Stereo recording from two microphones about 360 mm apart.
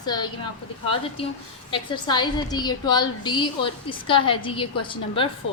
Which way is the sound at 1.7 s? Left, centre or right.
Centre.